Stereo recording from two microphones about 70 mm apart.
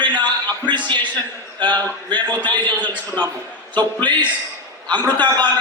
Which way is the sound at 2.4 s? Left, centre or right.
Left.